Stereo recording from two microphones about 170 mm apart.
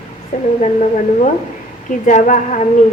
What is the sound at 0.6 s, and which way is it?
A woman's voice, 45° left (ahead or behind).